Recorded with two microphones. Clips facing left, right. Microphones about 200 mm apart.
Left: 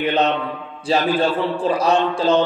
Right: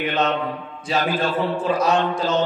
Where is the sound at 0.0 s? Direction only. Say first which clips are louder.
Left 3 dB; 35° left (ahead or behind).